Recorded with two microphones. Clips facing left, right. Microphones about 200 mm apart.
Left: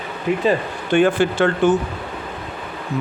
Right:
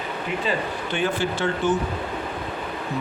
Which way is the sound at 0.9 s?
50° left (ahead or behind).